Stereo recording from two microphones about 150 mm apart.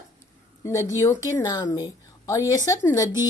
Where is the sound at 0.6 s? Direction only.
20° left (ahead or behind).